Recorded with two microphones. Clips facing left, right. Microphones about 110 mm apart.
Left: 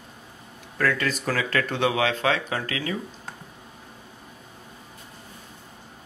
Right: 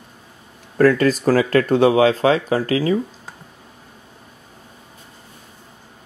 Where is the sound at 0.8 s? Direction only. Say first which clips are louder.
Right 11 dB; 40° right (ahead or behind).